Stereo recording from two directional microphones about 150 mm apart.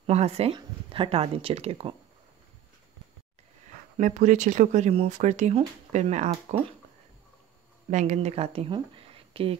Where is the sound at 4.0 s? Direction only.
55° right (ahead or behind).